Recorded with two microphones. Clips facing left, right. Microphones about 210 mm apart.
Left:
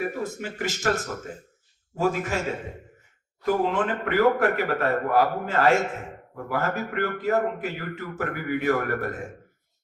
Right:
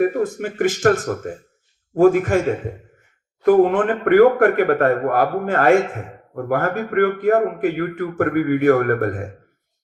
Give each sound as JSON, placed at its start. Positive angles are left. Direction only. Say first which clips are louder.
{"t": 0.0, "sound": "a man's voice", "louder": "right 10 dB", "side_deg": -50}